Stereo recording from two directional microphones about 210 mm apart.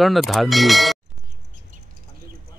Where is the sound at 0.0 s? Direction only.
Centre (ahead or behind).